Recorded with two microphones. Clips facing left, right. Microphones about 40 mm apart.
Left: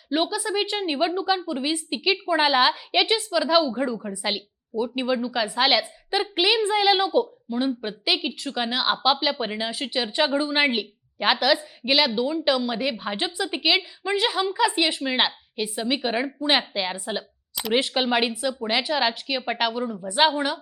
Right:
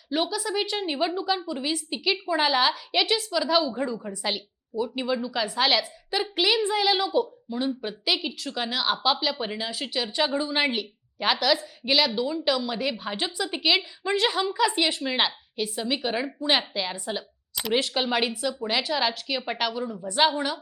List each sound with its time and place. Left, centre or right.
0.1 s a woman's voice: centre
17.5 s a sound: centre
17.7 s a woman's voice: centre